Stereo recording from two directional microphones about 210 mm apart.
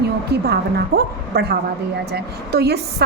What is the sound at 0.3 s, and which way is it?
A woman's voice, 50° right (ahead or behind).